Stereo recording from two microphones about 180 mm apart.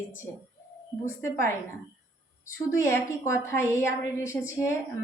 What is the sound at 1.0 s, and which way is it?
Speech, 15° left (ahead or behind).